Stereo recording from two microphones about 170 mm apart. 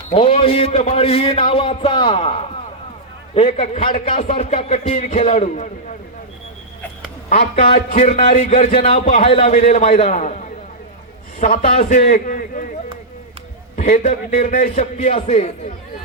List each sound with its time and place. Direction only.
0.1 s a man's voice: 35° left (ahead or behind)
7.3 s a man's voice: 35° left (ahead or behind)
11.3 s a man's voice: 45° left (ahead or behind)
13.7 s a man's voice: 45° left (ahead or behind)